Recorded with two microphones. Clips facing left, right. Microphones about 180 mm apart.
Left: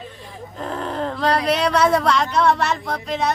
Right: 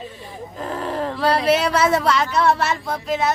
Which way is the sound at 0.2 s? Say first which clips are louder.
Left 2 dB; centre (ahead or behind).